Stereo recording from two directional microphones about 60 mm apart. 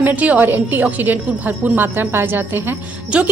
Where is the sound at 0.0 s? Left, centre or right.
Right.